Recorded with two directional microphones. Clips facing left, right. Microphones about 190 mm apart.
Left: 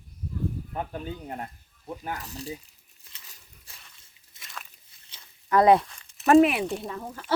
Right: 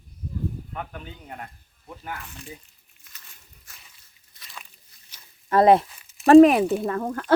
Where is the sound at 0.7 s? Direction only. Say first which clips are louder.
Left 3 dB; 30° left (ahead or behind).